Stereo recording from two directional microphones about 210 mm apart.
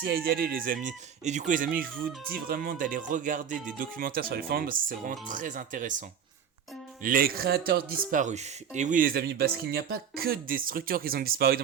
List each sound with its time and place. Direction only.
0.3 s speech: 45° right (ahead or behind)